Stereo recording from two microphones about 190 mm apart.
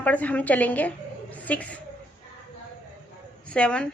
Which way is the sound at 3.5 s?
5° left (ahead or behind).